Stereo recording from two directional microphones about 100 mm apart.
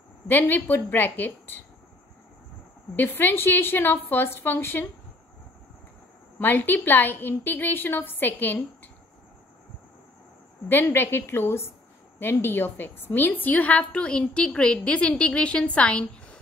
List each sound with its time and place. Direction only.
0.3 s a woman's voice: 20° left (ahead or behind)
3.0 s a woman's voice: 20° left (ahead or behind)
6.4 s a woman's voice: 20° left (ahead or behind)
10.7 s a woman's voice: 20° left (ahead or behind)